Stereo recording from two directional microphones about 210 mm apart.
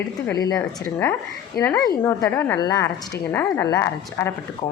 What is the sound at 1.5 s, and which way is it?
A woman's voice, 15° left (ahead or behind).